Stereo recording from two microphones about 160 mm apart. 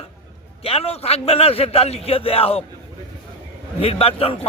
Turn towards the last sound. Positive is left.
turn(degrees=40)  # may be behind; listen again after turning